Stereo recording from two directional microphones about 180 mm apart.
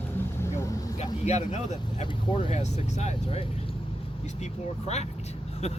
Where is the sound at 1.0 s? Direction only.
40° left (ahead or behind).